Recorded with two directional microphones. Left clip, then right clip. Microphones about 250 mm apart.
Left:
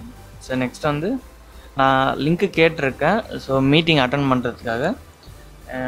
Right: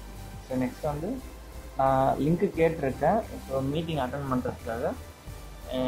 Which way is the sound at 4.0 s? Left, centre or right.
Left.